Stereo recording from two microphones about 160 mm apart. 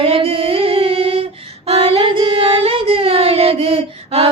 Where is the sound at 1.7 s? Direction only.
35° right (ahead or behind).